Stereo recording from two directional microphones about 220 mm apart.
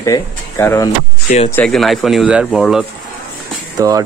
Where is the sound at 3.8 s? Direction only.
15° right (ahead or behind).